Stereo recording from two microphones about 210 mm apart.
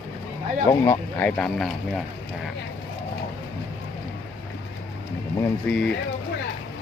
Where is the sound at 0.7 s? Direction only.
10° left (ahead or behind).